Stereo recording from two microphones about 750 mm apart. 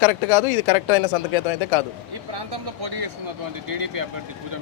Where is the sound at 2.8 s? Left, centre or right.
Right.